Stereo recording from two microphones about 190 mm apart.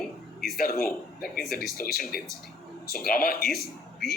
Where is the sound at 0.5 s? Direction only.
50° left (ahead or behind).